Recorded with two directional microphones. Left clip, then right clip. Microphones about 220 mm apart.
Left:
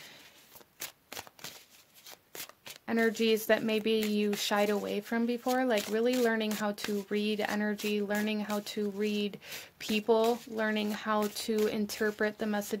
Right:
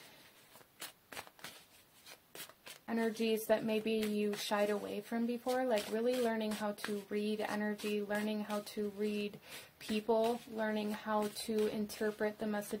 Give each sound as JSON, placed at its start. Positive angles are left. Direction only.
{"t": 0.7, "sound": "shuffling cards", "side_deg": 35}
{"t": 2.4, "sound": "speech", "side_deg": 40}